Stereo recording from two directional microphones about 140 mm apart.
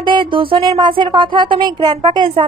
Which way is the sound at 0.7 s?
30° right (ahead or behind).